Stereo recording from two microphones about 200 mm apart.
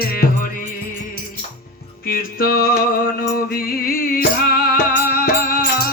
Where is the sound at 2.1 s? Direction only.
50° left (ahead or behind).